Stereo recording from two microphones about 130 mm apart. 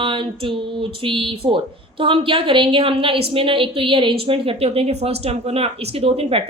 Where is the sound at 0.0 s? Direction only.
40° right (ahead or behind).